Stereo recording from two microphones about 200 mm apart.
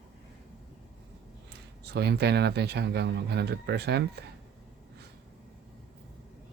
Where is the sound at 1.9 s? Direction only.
55° right (ahead or behind).